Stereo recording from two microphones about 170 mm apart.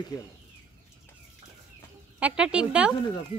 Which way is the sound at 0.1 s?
20° left (ahead or behind).